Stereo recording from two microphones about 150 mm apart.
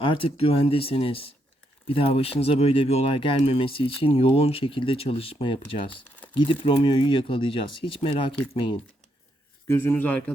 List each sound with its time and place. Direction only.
0.0 s speech: 35° left (ahead or behind)
9.6 s a man's voice: 15° left (ahead or behind)